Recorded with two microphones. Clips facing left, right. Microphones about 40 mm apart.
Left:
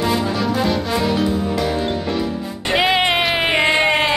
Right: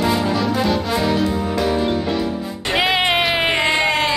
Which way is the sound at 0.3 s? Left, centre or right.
Centre.